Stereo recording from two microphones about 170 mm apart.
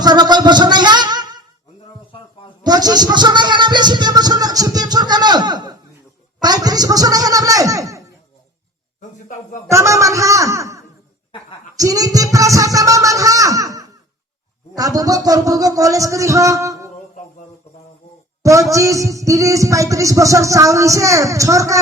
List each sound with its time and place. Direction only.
0.0 s a sound: 25° right (ahead or behind)
2.6 s speech: 25° right (ahead or behind)
9.6 s a man's voice: 15° right (ahead or behind)
18.4 s speech: 20° right (ahead or behind)